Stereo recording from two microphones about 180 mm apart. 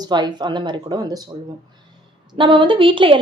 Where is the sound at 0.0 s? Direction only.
25° right (ahead or behind).